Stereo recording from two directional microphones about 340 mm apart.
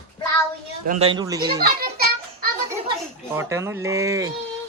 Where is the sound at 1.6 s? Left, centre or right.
Right.